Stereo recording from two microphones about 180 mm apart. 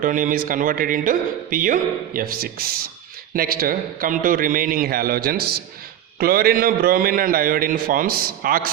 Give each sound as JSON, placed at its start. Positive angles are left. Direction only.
{"t": 0.0, "sound": "a man's voice", "side_deg": -50}